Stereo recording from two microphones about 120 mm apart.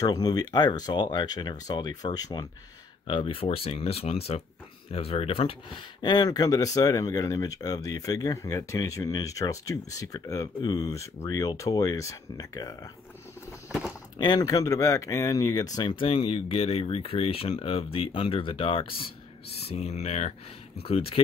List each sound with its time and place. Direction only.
0.0 s speech: 30° left (ahead or behind)
3.1 s speech: 50° left (ahead or behind)
6.0 s speech: 35° left (ahead or behind)
13.7 s a sound: 10° right (ahead or behind)
14.1 s speech: 40° left (ahead or behind); by 20.3 s 65° left (ahead or behind)
20.8 s speech: 50° left (ahead or behind)